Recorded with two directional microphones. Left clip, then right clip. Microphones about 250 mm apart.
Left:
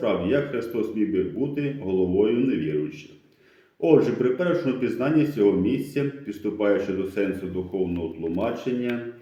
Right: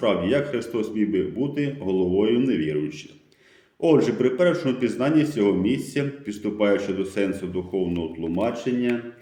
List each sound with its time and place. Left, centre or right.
0.0 s speech: right
3.8 s speech: right